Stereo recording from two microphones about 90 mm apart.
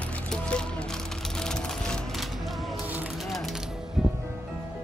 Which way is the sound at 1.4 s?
5° left (ahead or behind).